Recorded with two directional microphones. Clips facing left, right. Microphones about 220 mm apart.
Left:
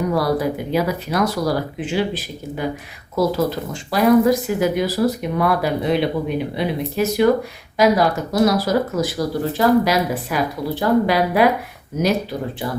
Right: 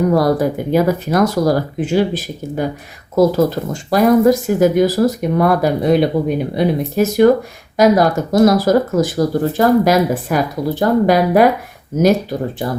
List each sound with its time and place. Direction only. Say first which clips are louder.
0.1 s speech: right 5 dB; 45° right (ahead or behind)